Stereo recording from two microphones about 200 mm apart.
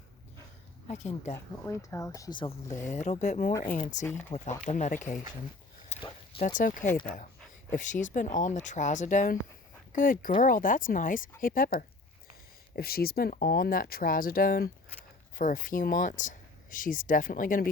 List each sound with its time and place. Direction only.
0.9 s speech: 35° left (ahead or behind)
1.6 s speech: 15° left (ahead or behind)
2.8 s speech: 35° left (ahead or behind)
6.0 s a sound: 25° left (ahead or behind)
6.6 s speech: 40° left (ahead or behind)